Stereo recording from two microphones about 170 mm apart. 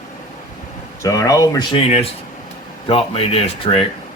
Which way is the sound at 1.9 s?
35° left (ahead or behind).